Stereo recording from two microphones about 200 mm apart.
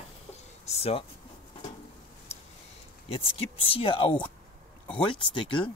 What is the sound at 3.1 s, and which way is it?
Speech, 25° left (ahead or behind).